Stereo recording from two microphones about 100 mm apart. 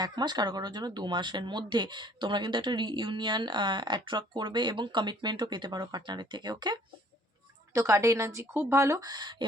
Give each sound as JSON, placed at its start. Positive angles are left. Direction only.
{"t": 0.0, "sound": "speech", "side_deg": -45}
{"t": 7.7, "sound": "speech", "side_deg": -30}